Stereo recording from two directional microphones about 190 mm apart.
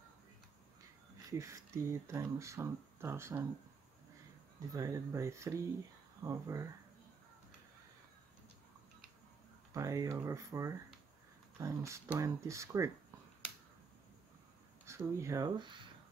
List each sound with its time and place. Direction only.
1.4 s speech: 15° right (ahead or behind)
4.6 s speech: 15° right (ahead or behind)
9.8 s speech: 15° right (ahead or behind)
14.9 s speech: 15° right (ahead or behind)